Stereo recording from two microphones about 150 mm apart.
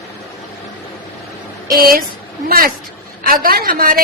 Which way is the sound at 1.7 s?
75° right (ahead or behind).